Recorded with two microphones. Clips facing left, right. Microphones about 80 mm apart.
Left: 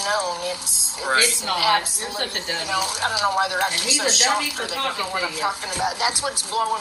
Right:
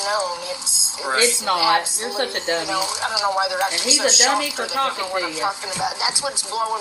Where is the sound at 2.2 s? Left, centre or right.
Right.